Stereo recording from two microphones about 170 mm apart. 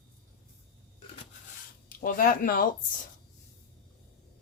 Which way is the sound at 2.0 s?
55° left (ahead or behind).